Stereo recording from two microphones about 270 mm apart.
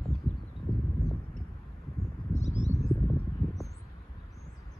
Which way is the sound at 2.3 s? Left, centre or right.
Left.